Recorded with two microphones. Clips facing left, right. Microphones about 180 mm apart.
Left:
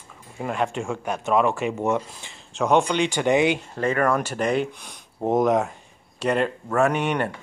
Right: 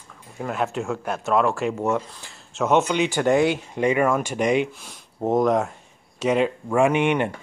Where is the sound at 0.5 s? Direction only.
5° right (ahead or behind).